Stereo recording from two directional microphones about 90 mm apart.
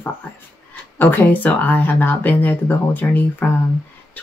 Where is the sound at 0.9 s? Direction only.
20° left (ahead or behind).